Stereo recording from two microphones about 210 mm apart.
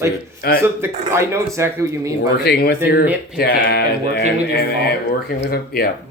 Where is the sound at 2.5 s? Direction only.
50° left (ahead or behind).